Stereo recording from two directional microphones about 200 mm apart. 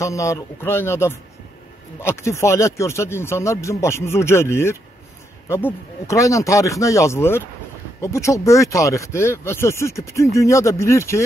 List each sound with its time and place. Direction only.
0.0 s speech: 15° left (ahead or behind)